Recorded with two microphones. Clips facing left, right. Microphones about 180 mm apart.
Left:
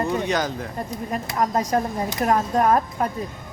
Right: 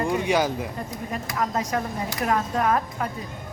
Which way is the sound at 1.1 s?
40° left (ahead or behind).